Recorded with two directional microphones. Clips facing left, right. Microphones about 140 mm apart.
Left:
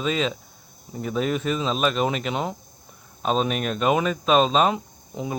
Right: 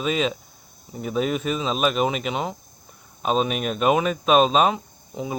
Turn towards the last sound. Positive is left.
turn(degrees=0)  # may be behind; listen again after turning